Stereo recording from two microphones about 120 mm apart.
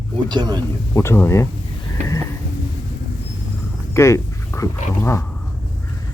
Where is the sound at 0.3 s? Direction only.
35° right (ahead or behind).